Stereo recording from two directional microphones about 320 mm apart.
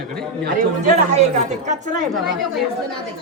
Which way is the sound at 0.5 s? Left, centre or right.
Right.